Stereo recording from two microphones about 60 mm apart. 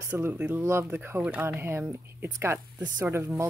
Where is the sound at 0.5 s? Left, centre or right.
Right.